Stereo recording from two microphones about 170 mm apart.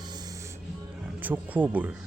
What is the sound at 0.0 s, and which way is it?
Music, 25° right (ahead or behind).